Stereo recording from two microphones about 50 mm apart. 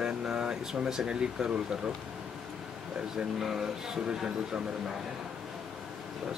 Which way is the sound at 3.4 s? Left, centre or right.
Centre.